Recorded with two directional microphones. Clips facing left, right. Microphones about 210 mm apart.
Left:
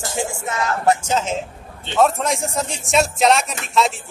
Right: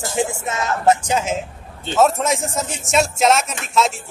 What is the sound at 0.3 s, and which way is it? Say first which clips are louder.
Music: even; 20° right (ahead or behind).